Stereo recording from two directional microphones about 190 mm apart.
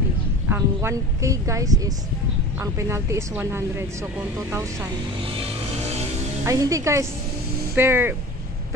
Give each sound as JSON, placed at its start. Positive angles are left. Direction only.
{"t": 0.5, "sound": "speech", "side_deg": -10}
{"t": 6.4, "sound": "speech", "side_deg": -15}